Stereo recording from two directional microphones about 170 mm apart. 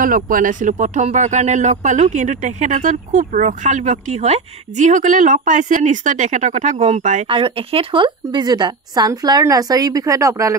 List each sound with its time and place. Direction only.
0.0 s speech: 55° right (ahead or behind)
7.3 s a woman's voice: 30° right (ahead or behind)